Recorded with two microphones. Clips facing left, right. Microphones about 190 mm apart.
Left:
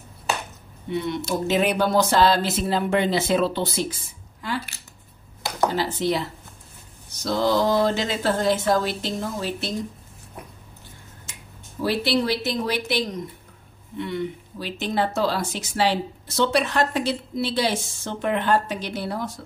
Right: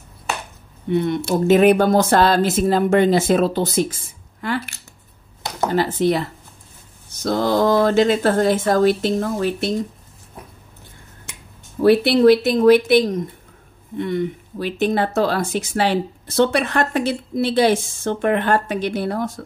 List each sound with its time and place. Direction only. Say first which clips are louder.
0.8 s speech: right 6 dB; 50° right (ahead or behind)
11.3 s finger snapping: right 5 dB; 65° right (ahead or behind)
11.8 s speech: right 10 dB; 55° right (ahead or behind)